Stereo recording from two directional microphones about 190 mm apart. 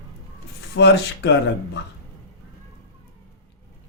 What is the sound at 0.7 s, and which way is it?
Speech, 65° left (ahead or behind).